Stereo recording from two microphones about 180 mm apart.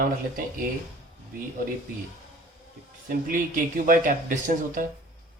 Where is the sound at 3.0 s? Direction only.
50° right (ahead or behind).